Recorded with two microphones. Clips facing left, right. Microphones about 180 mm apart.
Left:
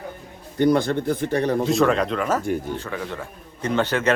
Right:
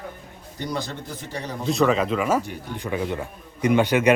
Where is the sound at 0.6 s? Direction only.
55° left (ahead or behind).